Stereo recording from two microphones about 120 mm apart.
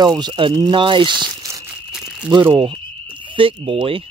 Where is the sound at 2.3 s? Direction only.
35° right (ahead or behind).